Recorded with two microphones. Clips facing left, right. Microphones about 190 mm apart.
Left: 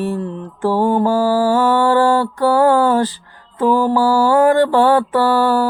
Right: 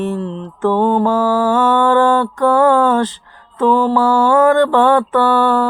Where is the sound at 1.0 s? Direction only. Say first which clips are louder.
Even; 35° left (ahead or behind).